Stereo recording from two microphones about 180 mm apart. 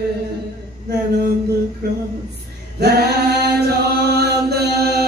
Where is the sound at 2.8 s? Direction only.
65° right (ahead or behind).